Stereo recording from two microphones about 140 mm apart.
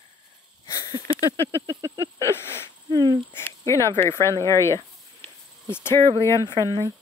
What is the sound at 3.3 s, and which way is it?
Speech, 20° left (ahead or behind).